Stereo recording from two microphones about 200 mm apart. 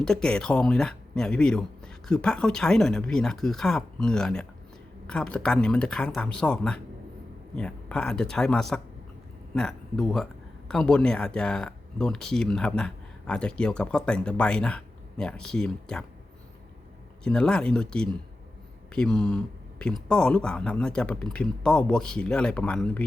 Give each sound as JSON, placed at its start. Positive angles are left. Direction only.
{"t": 0.0, "sound": "speech", "side_deg": 5}
{"t": 17.2, "sound": "speech", "side_deg": 5}